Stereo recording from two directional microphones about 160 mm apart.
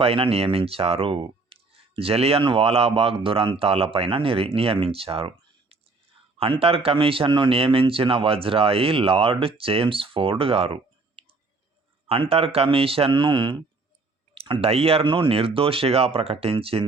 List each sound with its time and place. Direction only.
0.0 s speech: 35° right (ahead or behind)
11.2 s a sound: 35° right (ahead or behind)
12.3 s speech: 35° right (ahead or behind)